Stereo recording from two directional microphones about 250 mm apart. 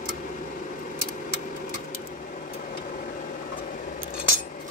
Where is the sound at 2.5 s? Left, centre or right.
Left.